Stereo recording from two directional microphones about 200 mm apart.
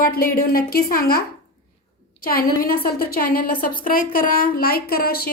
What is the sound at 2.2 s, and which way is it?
A woman's voice, 50° left (ahead or behind).